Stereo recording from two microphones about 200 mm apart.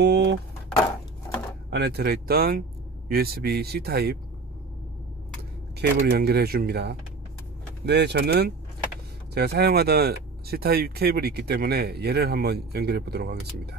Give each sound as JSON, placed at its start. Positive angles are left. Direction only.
{"t": 0.0, "sound": "a sound", "side_deg": -60}
{"t": 1.7, "sound": "speech", "side_deg": -55}
{"t": 5.8, "sound": "speech", "side_deg": -55}